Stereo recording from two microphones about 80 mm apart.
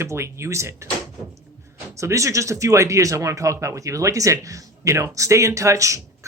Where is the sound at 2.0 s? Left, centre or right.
Right.